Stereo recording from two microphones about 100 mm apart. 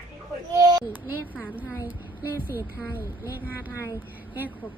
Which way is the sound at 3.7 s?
30° left (ahead or behind).